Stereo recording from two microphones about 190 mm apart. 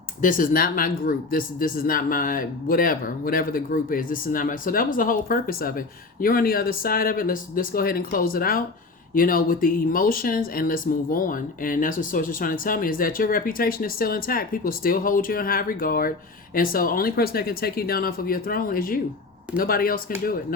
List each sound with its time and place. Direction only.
0.2 s speech: 45° left (ahead or behind)